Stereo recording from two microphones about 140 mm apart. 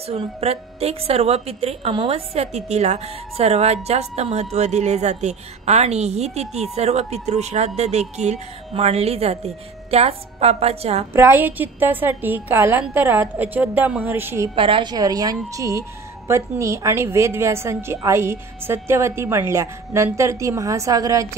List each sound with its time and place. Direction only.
0.0 s a woman's voice: 45° right (ahead or behind)
11.1 s a woman's voice: 15° right (ahead or behind)
14.5 s a woman's voice: 40° right (ahead or behind)